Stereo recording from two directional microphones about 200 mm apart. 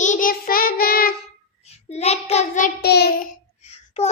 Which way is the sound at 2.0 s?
30° left (ahead or behind).